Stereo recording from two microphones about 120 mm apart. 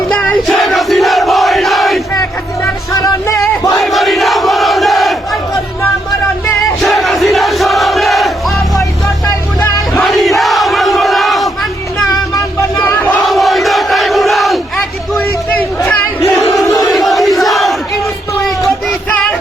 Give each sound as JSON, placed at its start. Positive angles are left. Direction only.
{"t": 0.1, "sound": "crowd", "side_deg": 5}
{"t": 2.9, "sound": "music", "side_deg": 30}
{"t": 3.8, "sound": "crowd", "side_deg": 0}
{"t": 6.8, "sound": "battle cry", "side_deg": 0}
{"t": 7.3, "sound": "music", "side_deg": 0}
{"t": 9.2, "sound": "a sound", "side_deg": 20}
{"t": 10.0, "sound": "battle cry", "side_deg": 0}
{"t": 12.1, "sound": "music", "side_deg": 30}
{"t": 13.2, "sound": "crowd", "side_deg": 0}
{"t": 15.9, "sound": "crowd", "side_deg": 15}
{"t": 16.6, "sound": "battle cry", "side_deg": 30}
{"t": 16.9, "sound": "crowd", "side_deg": 0}